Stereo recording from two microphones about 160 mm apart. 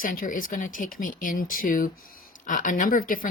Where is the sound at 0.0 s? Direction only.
60° left (ahead or behind).